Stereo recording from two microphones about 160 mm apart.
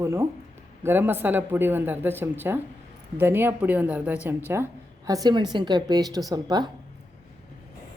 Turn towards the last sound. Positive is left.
turn(degrees=-25)  # may be behind; listen again after turning